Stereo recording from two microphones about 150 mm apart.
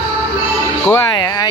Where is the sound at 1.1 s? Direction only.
25° left (ahead or behind).